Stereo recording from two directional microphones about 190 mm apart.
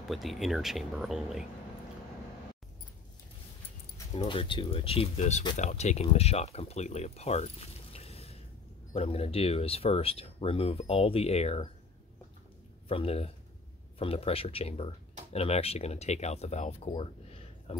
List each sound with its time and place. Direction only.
0.1 s speech: centre (ahead or behind)
4.1 s speech: 30° left (ahead or behind)
12.8 s speech: 30° left (ahead or behind)